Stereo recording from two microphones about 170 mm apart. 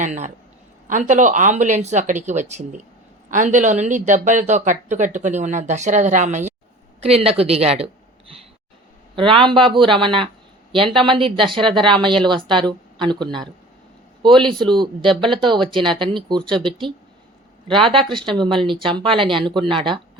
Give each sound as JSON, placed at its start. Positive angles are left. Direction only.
{"t": 0.0, "sound": "a woman's voice", "side_deg": -45}
{"t": 9.1, "sound": "speech", "side_deg": -30}
{"t": 14.4, "sound": "speech", "side_deg": -25}
{"t": 17.7, "sound": "speech", "side_deg": 0}
{"t": 18.3, "sound": "speech", "side_deg": -30}